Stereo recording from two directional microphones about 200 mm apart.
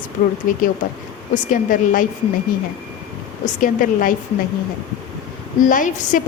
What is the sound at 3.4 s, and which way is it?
Speech, 40° left (ahead or behind).